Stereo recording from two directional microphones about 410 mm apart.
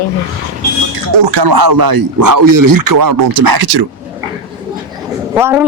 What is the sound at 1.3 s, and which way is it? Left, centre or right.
A man's voice, right.